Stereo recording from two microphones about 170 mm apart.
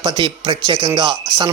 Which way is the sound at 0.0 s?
25° right (ahead or behind).